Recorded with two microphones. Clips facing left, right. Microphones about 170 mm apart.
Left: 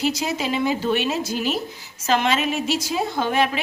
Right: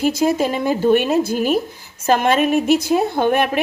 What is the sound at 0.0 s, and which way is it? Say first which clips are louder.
A woman's voice: right 7 dB; 50° right (ahead or behind).